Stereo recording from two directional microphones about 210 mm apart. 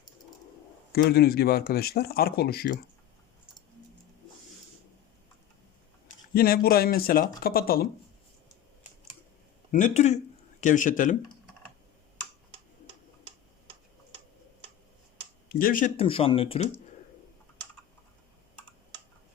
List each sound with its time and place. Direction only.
1.1 s speech: 45° left (ahead or behind)
6.3 s speech: 45° left (ahead or behind)
9.7 s speech: 35° left (ahead or behind)
15.4 s speech: 45° left (ahead or behind)
16.0 s speech: 25° left (ahead or behind)